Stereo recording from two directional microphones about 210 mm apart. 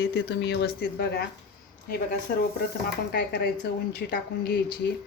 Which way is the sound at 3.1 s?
50° left (ahead or behind).